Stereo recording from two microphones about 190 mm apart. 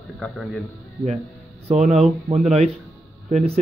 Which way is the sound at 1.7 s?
35° right (ahead or behind).